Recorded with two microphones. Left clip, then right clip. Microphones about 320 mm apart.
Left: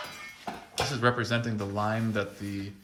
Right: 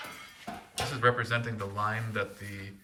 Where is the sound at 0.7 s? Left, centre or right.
Centre.